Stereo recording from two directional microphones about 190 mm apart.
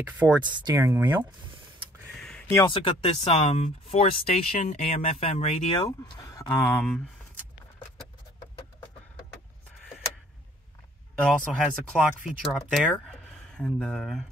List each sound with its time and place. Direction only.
0.0 s speech: 10° right (ahead or behind)
0.4 s speech: 25° right (ahead or behind)
2.1 s a sound: centre (ahead or behind)
2.5 s speech: 25° left (ahead or behind)
5.9 s speech: 15° left (ahead or behind)
11.6 s speech: 5° right (ahead or behind)